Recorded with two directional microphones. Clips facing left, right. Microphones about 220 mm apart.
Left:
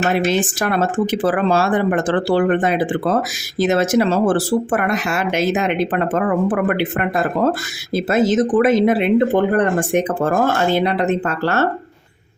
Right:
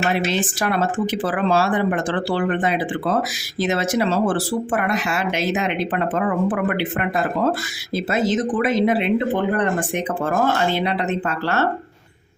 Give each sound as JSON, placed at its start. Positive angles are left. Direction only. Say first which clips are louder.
{"t": 0.3, "sound": "speech", "louder": "left 3 dB", "side_deg": 45}